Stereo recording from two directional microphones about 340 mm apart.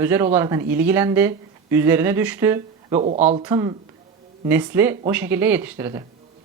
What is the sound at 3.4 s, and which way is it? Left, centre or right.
Speech, centre.